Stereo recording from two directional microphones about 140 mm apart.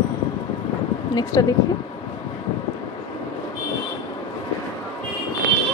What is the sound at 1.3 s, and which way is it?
Speech, 25° left (ahead or behind).